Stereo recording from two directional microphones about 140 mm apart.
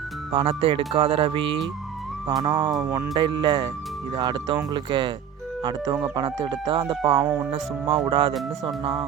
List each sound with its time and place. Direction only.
0.3 s speech: 40° right (ahead or behind)